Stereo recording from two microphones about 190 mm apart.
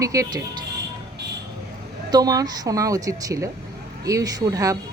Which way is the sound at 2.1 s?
20° right (ahead or behind).